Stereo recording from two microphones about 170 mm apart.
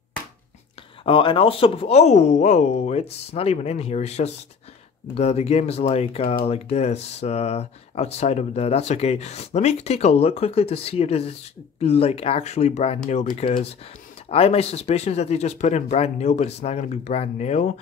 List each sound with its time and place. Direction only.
1.0 s speech: 30° left (ahead or behind)